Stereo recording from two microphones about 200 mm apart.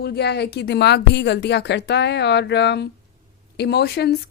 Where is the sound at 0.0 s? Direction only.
55° left (ahead or behind).